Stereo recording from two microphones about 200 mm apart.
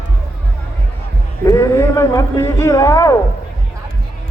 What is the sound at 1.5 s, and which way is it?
A man's voice, 15° left (ahead or behind).